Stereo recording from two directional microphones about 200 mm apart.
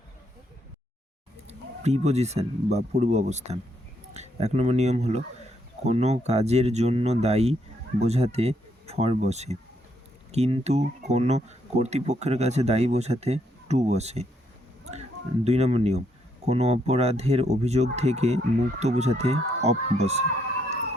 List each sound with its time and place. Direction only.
1.5 s speech: 35° right (ahead or behind)
15.4 s speech: 30° right (ahead or behind)